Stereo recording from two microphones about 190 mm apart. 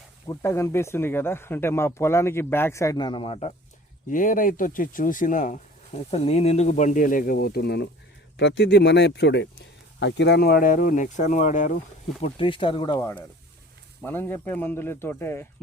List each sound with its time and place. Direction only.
0.3 s speech: 15° left (ahead or behind)
4.1 s speech: 45° left (ahead or behind)
12.2 s speech: 25° left (ahead or behind); by 15.4 s 10° left (ahead or behind)